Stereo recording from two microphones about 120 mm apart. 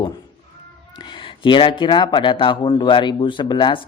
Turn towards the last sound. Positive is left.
turn(degrees=40)  # may be behind; listen again after turning